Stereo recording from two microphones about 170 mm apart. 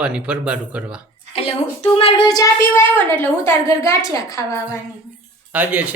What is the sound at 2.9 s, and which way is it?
A woman's voice, 15° left (ahead or behind).